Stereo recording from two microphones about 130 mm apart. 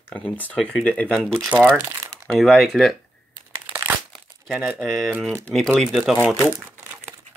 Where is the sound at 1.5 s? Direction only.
15° right (ahead or behind).